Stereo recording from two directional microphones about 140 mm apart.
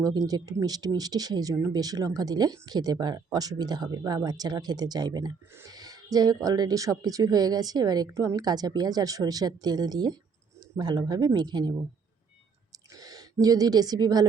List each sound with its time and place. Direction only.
0.0 s speech: 25° right (ahead or behind)
13.0 s speech: 25° right (ahead or behind)